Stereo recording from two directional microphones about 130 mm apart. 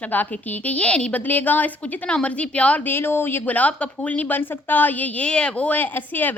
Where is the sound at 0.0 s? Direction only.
10° left (ahead or behind).